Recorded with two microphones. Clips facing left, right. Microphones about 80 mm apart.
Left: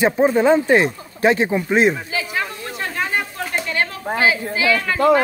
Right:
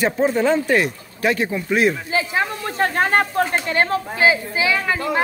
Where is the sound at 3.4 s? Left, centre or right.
Right.